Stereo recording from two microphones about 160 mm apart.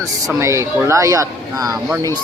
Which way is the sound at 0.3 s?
20° right (ahead or behind).